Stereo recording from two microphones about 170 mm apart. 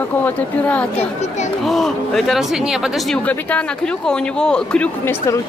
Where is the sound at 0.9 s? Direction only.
40° left (ahead or behind).